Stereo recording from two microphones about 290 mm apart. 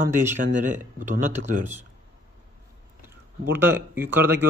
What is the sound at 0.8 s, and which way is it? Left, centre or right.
Speech, right.